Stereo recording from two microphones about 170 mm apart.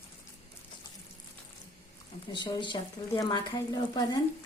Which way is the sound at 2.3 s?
25° left (ahead or behind).